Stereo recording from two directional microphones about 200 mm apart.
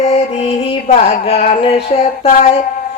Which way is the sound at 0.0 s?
30° left (ahead or behind).